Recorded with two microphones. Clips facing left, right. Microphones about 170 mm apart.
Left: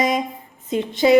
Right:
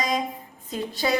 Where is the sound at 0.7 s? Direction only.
20° left (ahead or behind).